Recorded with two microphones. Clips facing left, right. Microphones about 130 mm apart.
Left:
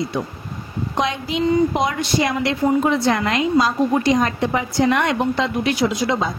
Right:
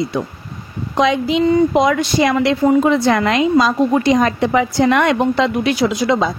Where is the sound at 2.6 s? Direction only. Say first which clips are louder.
Right 3 dB; 90° right.